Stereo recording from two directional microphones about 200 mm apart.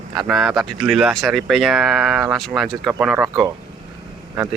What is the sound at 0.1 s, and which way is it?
Speech, centre (ahead or behind).